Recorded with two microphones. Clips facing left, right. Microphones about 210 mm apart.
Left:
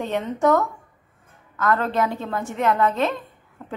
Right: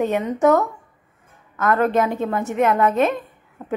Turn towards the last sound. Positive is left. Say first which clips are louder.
# right 3 dB
turn(degrees=-20)  # may be behind; listen again after turning